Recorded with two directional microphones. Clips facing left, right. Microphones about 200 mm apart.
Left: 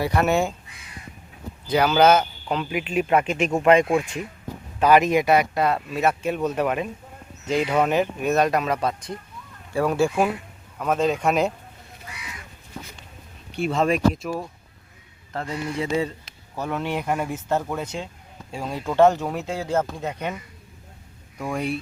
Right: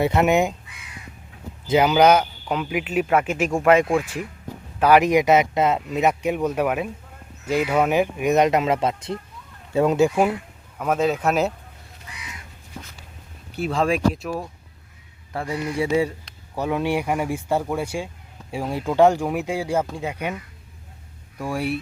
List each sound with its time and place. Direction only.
0.0 s speech: 20° right (ahead or behind)
1.6 s speech: 20° right (ahead or behind); by 11.5 s 5° right (ahead or behind)
13.5 s speech: centre (ahead or behind)
21.3 s speech: 5° right (ahead or behind)